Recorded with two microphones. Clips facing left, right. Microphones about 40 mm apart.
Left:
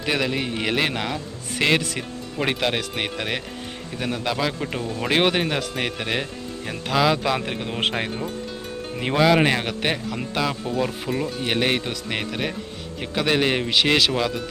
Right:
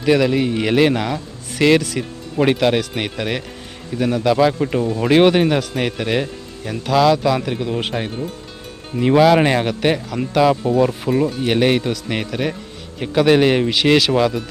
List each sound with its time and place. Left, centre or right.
0.0 s speech: centre
2.4 s speech: centre
4.4 s speech: centre
4.9 s speech: centre
6.9 s speech: centre
7.2 s a man's voice: left
7.8 s speech: left
9.1 s speech: centre